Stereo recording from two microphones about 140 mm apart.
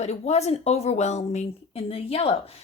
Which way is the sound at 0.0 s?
50° left (ahead or behind).